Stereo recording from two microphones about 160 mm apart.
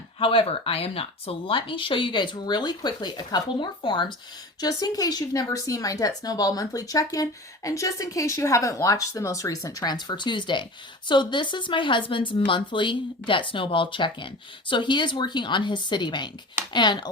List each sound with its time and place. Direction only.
0.2 s speech: 35° left (ahead or behind)